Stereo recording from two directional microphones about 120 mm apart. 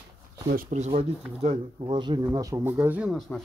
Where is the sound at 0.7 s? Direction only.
80° right.